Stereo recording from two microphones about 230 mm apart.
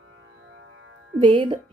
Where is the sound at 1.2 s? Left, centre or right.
Right.